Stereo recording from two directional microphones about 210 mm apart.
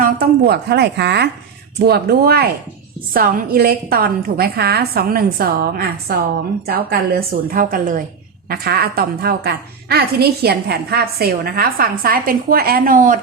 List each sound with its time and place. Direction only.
0.0 s a woman's voice: 45° right (ahead or behind)